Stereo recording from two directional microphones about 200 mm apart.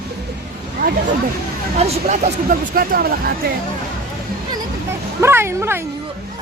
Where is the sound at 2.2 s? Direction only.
45° right (ahead or behind).